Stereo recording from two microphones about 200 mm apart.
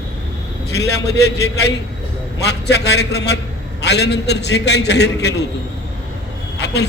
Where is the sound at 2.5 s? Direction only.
55° left (ahead or behind).